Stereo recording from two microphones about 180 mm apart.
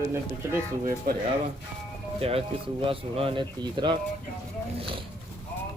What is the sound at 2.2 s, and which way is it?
Speech, 35° right (ahead or behind).